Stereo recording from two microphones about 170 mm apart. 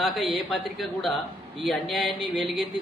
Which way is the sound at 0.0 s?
Centre (ahead or behind).